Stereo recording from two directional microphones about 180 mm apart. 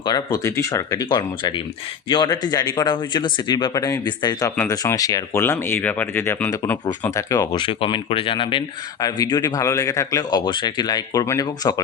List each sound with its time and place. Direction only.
0.0 s speech: 20° left (ahead or behind)